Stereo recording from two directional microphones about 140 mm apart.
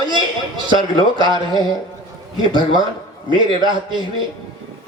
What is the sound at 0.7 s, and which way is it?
Speech, 35° right (ahead or behind).